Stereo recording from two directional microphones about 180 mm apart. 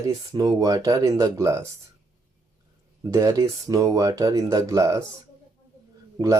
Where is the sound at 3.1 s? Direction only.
15° right (ahead or behind).